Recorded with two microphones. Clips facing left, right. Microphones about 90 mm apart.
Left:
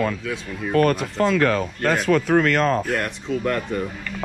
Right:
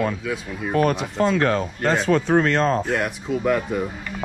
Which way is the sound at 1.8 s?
Centre (ahead or behind).